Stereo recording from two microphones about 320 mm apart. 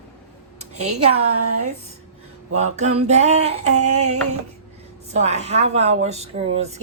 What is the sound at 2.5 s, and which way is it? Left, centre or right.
Speech, right.